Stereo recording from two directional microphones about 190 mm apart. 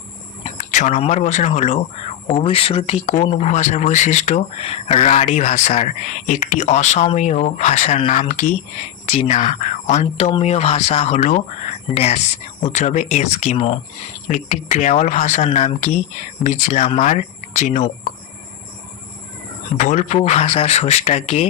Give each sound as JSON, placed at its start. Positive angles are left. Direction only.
{"t": 0.6, "sound": "speech", "side_deg": 40}
{"t": 19.7, "sound": "speech", "side_deg": 40}